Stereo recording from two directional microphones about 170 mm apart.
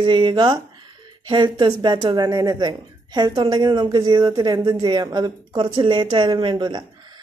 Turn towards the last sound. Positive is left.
turn(degrees=-25)  # may be behind; listen again after turning